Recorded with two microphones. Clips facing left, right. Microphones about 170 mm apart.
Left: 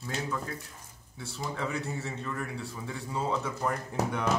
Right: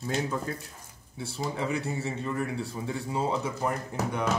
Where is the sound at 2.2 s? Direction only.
25° right (ahead or behind).